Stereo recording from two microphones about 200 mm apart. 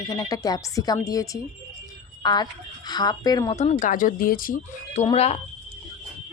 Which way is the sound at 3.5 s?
35° left (ahead or behind).